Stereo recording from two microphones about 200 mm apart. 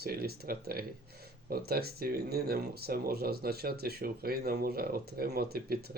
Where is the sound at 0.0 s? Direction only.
50° right (ahead or behind).